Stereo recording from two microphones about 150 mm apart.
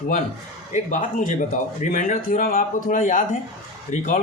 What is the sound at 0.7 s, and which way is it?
A man's voice, 60° left (ahead or behind).